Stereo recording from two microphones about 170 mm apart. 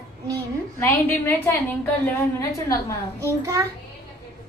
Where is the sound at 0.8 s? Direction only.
10° left (ahead or behind).